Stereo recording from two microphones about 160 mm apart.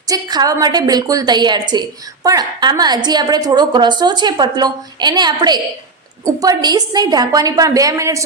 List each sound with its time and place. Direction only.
0.1 s a woman's voice: 25° right (ahead or behind)